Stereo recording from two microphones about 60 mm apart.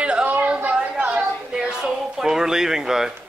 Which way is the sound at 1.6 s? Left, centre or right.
Centre.